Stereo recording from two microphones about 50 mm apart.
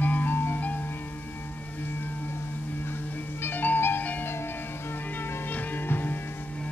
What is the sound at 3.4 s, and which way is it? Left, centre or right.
Music, left.